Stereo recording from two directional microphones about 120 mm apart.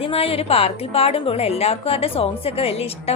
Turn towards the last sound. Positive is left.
turn(degrees=55)  # may be behind; listen again after turning